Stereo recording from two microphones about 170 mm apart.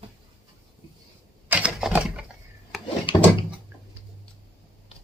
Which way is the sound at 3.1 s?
30° left (ahead or behind).